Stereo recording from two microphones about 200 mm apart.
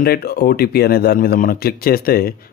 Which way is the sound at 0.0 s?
50° left (ahead or behind).